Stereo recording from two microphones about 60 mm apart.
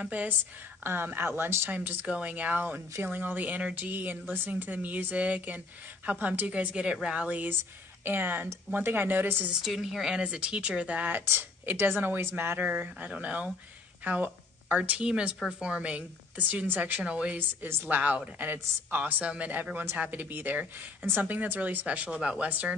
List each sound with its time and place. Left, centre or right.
0.0 s speech: right
0.8 s speech: right
1.7 s speech: right
8.0 s speech: right
9.7 s speech: centre; by 11.1 s right
11.1 s speech: right
12.6 s speech: right
17.0 s speech: centre
17.4 s speech: right